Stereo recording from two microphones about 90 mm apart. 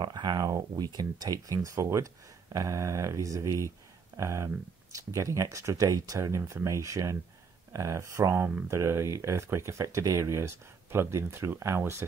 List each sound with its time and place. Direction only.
0.0 s speech: 50° right (ahead or behind); by 12.0 s 30° right (ahead or behind)